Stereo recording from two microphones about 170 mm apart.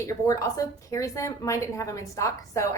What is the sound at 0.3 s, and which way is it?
A woman's voice, 20° left (ahead or behind).